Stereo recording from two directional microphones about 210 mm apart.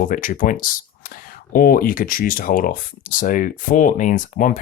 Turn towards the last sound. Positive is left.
turn(degrees=40)  # may be behind; listen again after turning